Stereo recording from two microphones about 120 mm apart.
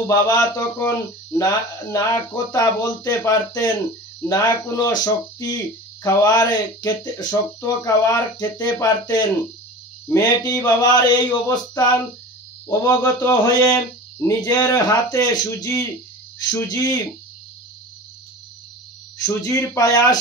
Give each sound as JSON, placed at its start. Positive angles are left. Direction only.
{"t": 0.0, "sound": "speech", "side_deg": 25}
{"t": 19.2, "sound": "speech", "side_deg": 25}